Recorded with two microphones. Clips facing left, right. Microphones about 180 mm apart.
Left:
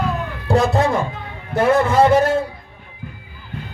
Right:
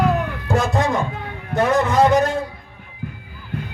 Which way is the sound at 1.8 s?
10° left (ahead or behind).